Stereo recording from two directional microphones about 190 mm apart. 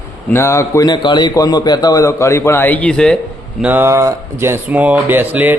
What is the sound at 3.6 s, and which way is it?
Speech, 10° right (ahead or behind).